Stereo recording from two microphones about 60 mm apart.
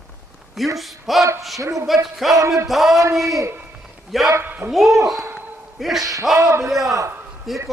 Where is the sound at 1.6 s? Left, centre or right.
Right.